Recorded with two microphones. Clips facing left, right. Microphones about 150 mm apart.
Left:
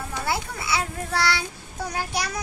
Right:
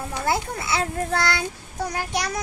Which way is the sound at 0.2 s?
50° right (ahead or behind).